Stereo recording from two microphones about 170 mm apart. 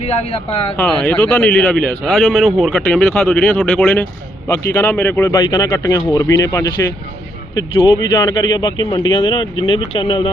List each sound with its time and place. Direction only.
0.0 s speech: 35° left (ahead or behind)
0.8 s speech: 5° left (ahead or behind)
5.4 s speech: 25° left (ahead or behind)
7.8 s speech: 25° left (ahead or behind)